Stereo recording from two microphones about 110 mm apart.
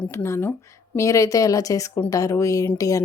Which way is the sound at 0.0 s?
20° left (ahead or behind).